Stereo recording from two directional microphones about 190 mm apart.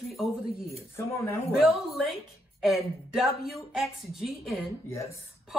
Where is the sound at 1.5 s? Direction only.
Centre (ahead or behind).